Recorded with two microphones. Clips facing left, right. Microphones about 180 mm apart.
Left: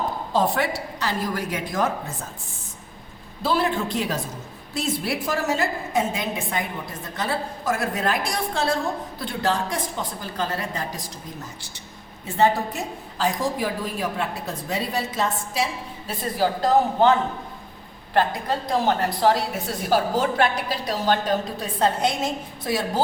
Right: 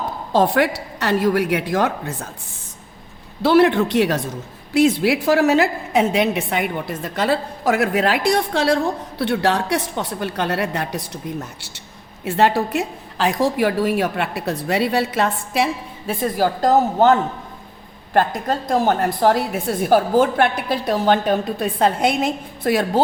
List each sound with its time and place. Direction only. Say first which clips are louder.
0.3 s a woman's voice: right 6 dB; 70° right (ahead or behind)
3.4 s a woman's voice: right 9 dB; 75° right (ahead or behind)
12.2 s a woman's voice: right 3 dB; 75° right (ahead or behind); by 22.9 s 60° right (ahead or behind)